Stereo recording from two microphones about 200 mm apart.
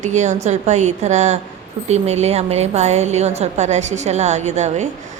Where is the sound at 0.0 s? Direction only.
35° right (ahead or behind).